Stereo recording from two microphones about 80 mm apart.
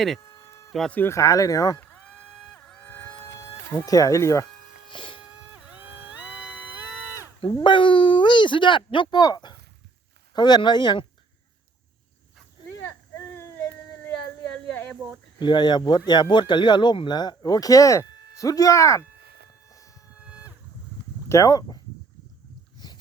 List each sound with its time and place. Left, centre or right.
0.3 s a sound: left
1.0 s speech: left
1.8 s a sound: centre
2.6 s vehicle: centre
3.8 s speech: left
4.9 s a sound: left
5.5 s music: centre
7.4 s speech: left
13.1 s baby cry: left
15.4 s speech: left
19.7 s civil defense siren: left
20.1 s vehicle: centre
21.2 s speech: left